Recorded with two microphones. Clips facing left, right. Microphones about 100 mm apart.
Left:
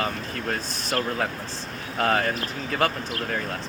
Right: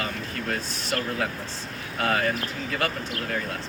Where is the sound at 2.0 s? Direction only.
35° left (ahead or behind).